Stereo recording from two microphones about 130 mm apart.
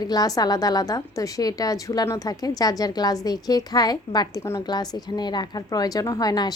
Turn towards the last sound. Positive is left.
turn(degrees=30)  # may be behind; listen again after turning